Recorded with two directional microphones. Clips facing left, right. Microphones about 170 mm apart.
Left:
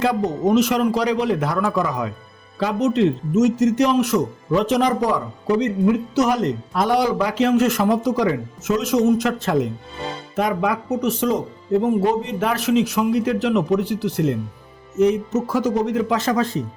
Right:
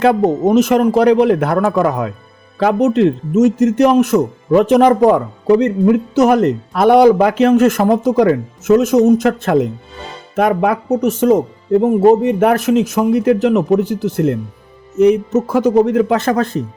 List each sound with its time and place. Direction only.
0.0 s speech: 55° right (ahead or behind)
15.0 s speech: 60° right (ahead or behind)